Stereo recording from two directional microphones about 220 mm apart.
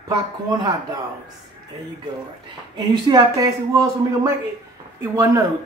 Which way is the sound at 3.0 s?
15° right (ahead or behind).